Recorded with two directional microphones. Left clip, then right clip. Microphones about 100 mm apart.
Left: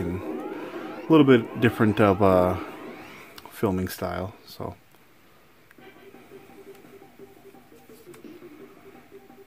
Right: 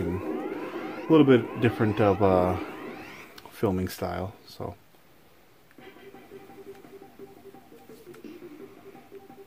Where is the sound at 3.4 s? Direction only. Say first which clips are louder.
Left 1 dB; 40° left (ahead or behind).